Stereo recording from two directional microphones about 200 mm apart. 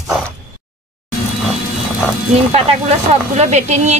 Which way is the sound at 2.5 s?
35° right (ahead or behind).